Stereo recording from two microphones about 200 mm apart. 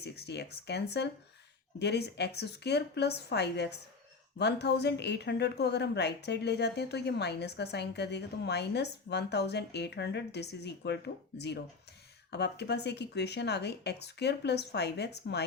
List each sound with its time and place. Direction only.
0.0 s a woman's voice: 55° left (ahead or behind)